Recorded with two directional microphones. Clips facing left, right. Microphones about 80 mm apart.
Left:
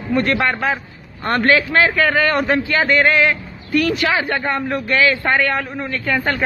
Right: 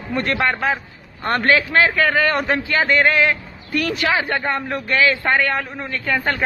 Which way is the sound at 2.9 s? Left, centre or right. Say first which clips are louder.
Left 1 dB; centre.